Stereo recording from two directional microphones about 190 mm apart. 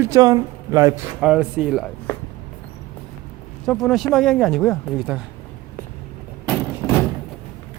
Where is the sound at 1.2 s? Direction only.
5° right (ahead or behind).